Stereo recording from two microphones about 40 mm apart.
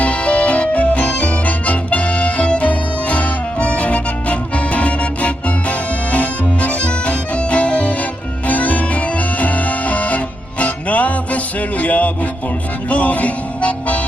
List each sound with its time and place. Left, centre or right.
0.0 s music: left